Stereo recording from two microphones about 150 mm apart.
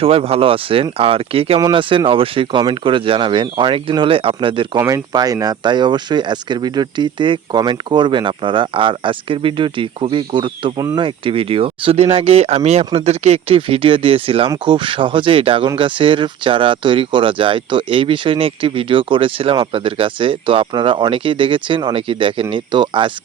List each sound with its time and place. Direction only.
0.0 s speech: 40° right (ahead or behind)
10.8 s speech: 20° right (ahead or behind)
11.0 s speech: 35° right (ahead or behind)